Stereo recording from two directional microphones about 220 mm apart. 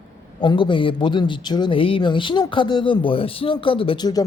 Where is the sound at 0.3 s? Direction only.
20° left (ahead or behind).